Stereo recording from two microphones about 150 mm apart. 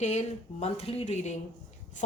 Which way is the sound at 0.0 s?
45° left (ahead or behind).